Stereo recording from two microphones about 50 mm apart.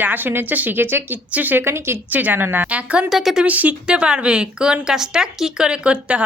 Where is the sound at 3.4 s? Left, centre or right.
Right.